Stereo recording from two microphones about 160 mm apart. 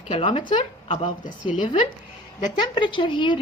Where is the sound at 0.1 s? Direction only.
35° left (ahead or behind).